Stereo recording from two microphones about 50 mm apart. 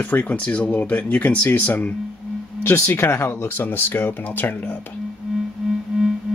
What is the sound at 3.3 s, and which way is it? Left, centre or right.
Speech, left.